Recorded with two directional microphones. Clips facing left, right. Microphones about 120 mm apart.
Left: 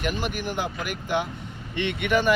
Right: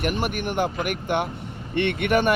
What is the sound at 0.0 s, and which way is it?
Speech, 55° right (ahead or behind).